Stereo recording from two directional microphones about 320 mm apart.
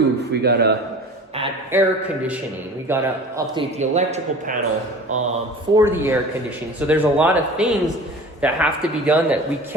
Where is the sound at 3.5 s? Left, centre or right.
Right.